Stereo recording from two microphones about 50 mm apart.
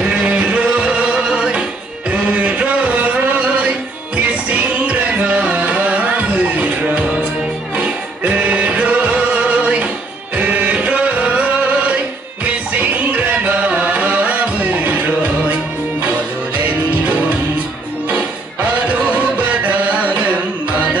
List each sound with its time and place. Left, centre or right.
0.1 s music: right
2.2 s a sound: right
4.5 s music: right
10.3 s chant: right
12.4 s music: right
16.5 s music: right
18.9 s music: right